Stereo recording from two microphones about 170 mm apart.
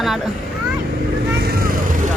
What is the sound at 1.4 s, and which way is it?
Vehicle, 65° right (ahead or behind).